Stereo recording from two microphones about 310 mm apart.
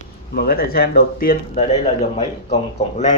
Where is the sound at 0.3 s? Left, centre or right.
Left.